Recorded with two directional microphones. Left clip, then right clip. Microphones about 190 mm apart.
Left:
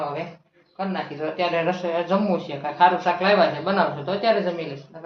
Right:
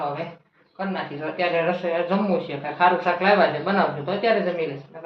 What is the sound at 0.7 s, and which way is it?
Speech, 15° left (ahead or behind).